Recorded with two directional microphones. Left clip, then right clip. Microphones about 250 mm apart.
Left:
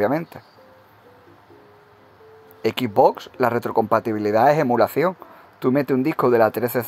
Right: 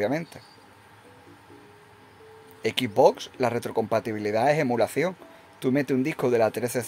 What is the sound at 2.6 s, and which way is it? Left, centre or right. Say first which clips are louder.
Speech: left 3 dB; centre.